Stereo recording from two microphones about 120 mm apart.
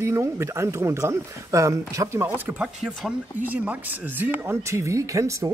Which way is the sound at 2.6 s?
5° right (ahead or behind).